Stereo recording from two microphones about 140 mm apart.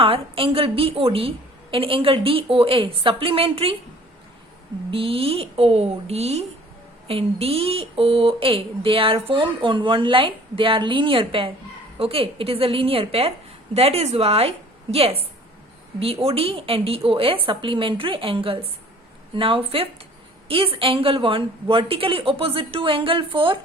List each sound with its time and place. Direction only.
0.0 s a woman's voice: 40° right (ahead or behind)
4.9 s a woman's voice: 40° right (ahead or behind)